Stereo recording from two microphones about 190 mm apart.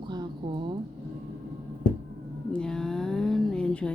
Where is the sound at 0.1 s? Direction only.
25° right (ahead or behind).